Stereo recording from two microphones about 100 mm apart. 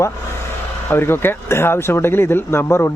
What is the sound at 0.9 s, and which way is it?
Speech, 25° left (ahead or behind).